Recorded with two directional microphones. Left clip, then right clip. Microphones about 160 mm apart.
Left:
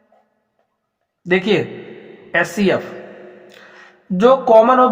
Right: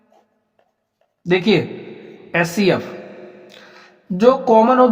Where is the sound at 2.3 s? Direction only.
35° right (ahead or behind).